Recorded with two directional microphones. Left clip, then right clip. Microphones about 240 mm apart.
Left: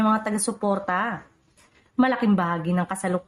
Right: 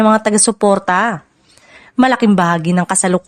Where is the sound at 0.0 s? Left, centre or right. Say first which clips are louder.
Right 11 dB; right.